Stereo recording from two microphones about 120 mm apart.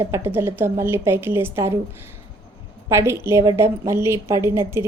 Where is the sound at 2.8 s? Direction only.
25° right (ahead or behind).